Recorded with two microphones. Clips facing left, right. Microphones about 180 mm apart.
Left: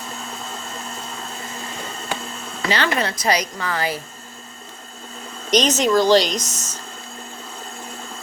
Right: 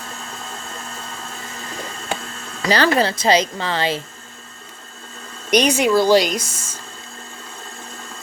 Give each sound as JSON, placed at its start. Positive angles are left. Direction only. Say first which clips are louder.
{"t": 2.6, "sound": "speech", "louder": "right 5 dB", "side_deg": -35}
{"t": 5.5, "sound": "speech", "louder": "right 2 dB", "side_deg": -10}